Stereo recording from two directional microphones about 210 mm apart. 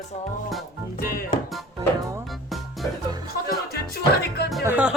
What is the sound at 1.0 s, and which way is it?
Speech, 40° left (ahead or behind).